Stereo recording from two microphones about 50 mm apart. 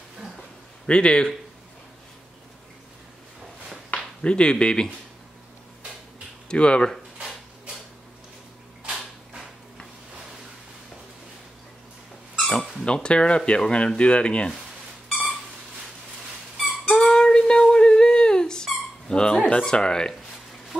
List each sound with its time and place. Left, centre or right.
0.8 s speech: centre
4.2 s speech: centre
6.5 s speech: centre
7.2 s dishes: centre
8.8 s creak: centre
12.4 s dog: centre
12.8 s speech: centre
15.0 s a sound: centre
16.9 s a sound: centre